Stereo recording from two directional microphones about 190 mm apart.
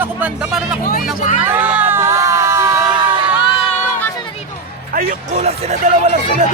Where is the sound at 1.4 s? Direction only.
10° right (ahead or behind).